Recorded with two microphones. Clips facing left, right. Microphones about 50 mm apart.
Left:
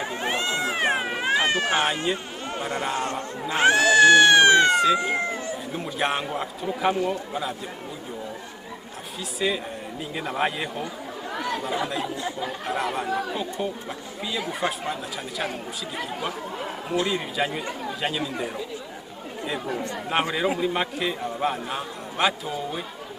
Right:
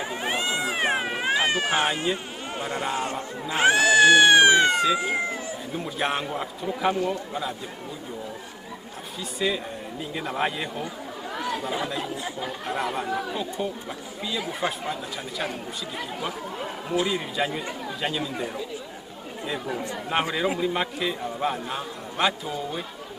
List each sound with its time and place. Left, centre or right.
0.1 s cat: centre
0.8 s cat: centre
1.7 s a man's voice: centre
4.6 s a man's voice: centre
9.4 s a man's voice: centre